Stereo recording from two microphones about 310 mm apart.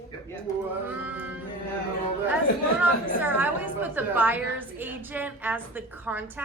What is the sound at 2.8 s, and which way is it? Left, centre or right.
A woman's voice, centre.